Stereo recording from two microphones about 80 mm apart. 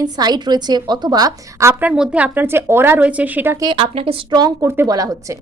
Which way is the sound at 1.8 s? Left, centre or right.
Centre.